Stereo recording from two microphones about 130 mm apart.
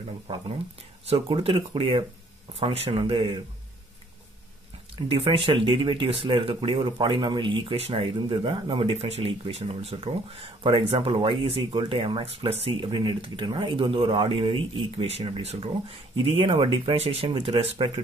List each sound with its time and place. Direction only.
1.0 s speech: 45° right (ahead or behind)
4.9 s speech: 40° right (ahead or behind)